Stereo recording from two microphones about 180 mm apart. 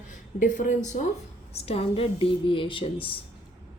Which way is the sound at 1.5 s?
35° left (ahead or behind).